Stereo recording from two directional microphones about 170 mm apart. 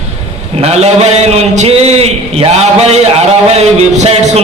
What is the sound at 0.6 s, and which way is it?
A man's voice, 40° right (ahead or behind).